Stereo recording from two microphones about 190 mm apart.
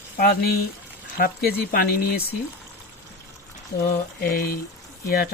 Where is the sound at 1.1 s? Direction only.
55° left (ahead or behind).